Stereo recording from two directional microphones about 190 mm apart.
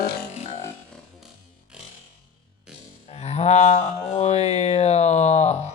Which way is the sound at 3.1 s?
35° left (ahead or behind).